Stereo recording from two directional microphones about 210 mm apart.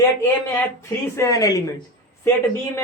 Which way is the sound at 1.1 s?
15° left (ahead or behind).